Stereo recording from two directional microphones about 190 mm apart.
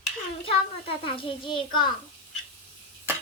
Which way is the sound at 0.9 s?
30° left (ahead or behind).